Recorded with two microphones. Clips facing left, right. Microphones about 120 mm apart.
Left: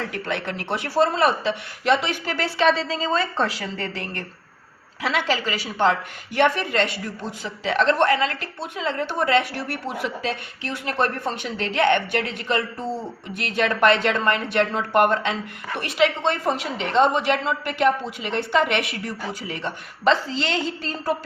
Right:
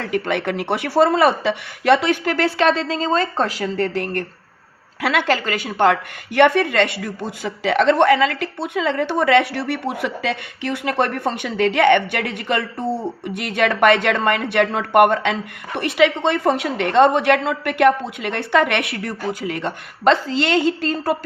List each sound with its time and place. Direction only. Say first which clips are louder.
0.0 s a woman's voice: right 6 dB; 65° right (ahead or behind); by 4.2 s 50° right (ahead or behind)
4.9 s a woman's voice: right 4 dB; 60° right (ahead or behind)